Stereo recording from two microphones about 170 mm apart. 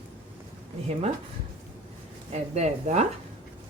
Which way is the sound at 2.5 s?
40° right (ahead or behind).